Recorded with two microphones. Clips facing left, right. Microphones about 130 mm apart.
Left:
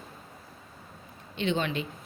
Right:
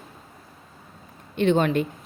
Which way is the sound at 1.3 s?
50° right (ahead or behind).